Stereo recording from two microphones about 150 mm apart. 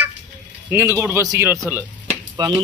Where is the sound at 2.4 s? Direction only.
30° right (ahead or behind).